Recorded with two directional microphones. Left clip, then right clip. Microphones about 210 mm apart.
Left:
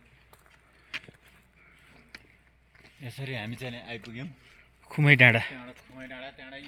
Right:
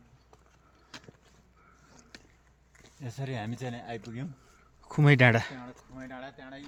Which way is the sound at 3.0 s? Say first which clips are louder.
Left 1 dB; 45° right (ahead or behind).